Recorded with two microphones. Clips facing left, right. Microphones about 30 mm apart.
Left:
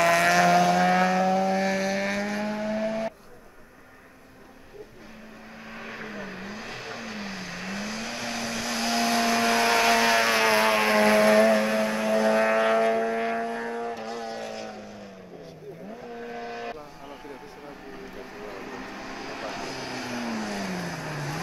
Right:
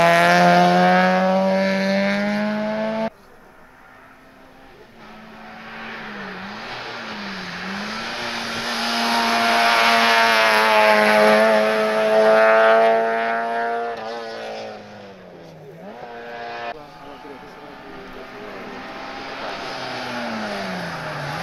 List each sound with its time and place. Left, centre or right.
0.0 s vehicle: right
5.6 s vehicle: right
16.1 s vehicle: right
18.4 s vehicle: right